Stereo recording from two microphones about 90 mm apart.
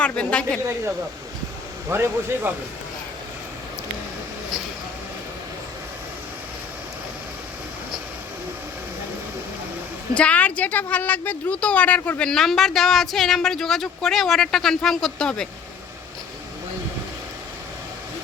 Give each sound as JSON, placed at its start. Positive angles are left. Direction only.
{"t": 0.0, "sound": "a woman's voice", "side_deg": 10}
{"t": 1.9, "sound": "speech", "side_deg": -25}
{"t": 10.2, "sound": "a woman's voice", "side_deg": 15}